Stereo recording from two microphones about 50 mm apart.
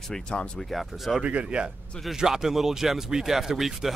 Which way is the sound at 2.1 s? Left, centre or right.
Centre.